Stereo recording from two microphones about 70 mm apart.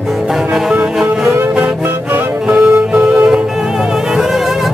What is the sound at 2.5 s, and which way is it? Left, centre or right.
Music, centre.